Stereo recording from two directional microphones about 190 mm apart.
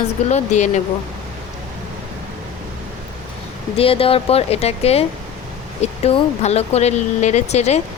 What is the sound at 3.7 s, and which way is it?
Speech, 30° left (ahead or behind).